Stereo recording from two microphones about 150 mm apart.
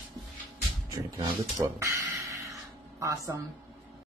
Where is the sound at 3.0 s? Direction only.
20° right (ahead or behind).